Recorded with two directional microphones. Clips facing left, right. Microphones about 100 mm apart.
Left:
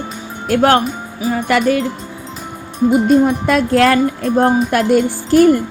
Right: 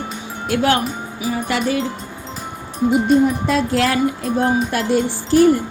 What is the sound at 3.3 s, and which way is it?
Speech, 60° left (ahead or behind).